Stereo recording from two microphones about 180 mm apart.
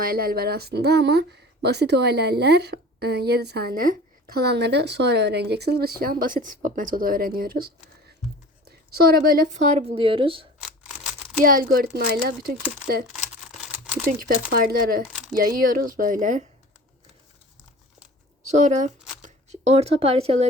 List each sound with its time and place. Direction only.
0.0 s a woman's voice: 55° right (ahead or behind); by 10.4 s 30° right (ahead or behind)
11.4 s speech: 50° right (ahead or behind)
14.5 s speech: 55° right (ahead or behind)
18.4 s a woman's voice: 40° right (ahead or behind)